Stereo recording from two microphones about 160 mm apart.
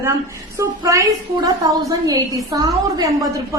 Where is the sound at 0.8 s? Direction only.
20° right (ahead or behind).